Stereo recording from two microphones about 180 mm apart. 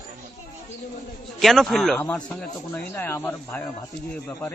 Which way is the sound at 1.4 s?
Centre (ahead or behind).